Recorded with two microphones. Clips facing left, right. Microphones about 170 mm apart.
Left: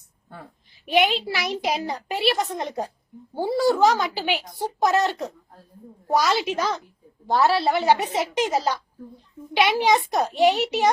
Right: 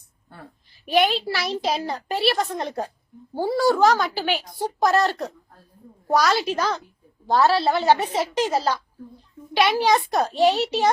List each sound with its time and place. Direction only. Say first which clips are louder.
0.9 s a child's voice: right 1 dB; 15° left (ahead or behind)
6.1 s a child's voice: right 1 dB; 20° left (ahead or behind)